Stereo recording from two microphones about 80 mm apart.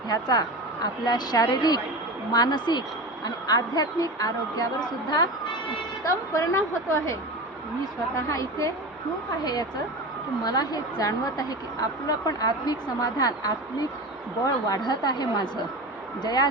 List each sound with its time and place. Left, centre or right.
0.1 s a woman's voice: left
6.1 s a woman's voice: left
8.3 s a woman's voice: left
9.4 s a woman's voice: left